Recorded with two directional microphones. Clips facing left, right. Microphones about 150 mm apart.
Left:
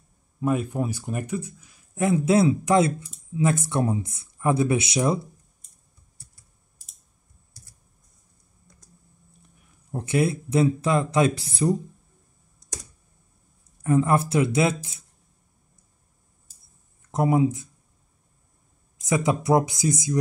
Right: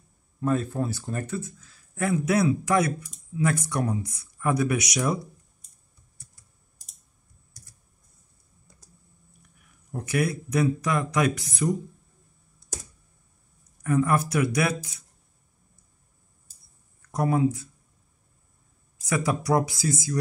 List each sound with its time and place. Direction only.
0.4 s speech: 10° left (ahead or behind)
9.4 s speech: 30° left (ahead or behind)
12.6 s computer keyboard: 40° left (ahead or behind)
13.8 s speech: 25° left (ahead or behind)
17.0 s speech: 20° left (ahead or behind)
19.0 s speech: 20° left (ahead or behind)